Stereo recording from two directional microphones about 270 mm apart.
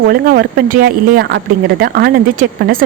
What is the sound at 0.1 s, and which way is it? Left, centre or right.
Speech, right.